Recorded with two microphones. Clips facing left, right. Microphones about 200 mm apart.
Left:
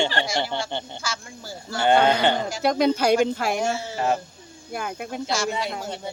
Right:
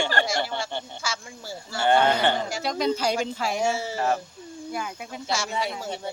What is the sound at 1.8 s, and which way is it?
Speech, 15° left (ahead or behind).